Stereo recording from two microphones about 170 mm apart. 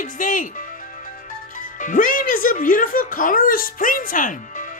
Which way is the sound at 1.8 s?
50° left (ahead or behind).